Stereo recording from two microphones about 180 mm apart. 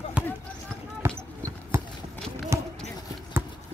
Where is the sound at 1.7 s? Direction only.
15° right (ahead or behind).